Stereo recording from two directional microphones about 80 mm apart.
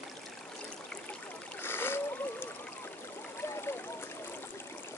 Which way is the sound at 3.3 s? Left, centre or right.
Left.